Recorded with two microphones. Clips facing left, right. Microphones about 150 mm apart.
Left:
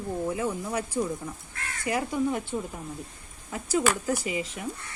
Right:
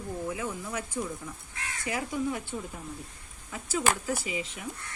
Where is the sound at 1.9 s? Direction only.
40° left (ahead or behind).